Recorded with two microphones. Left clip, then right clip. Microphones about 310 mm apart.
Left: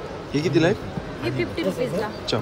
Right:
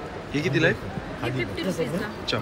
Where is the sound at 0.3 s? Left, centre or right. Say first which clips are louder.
Left 2 dB; centre.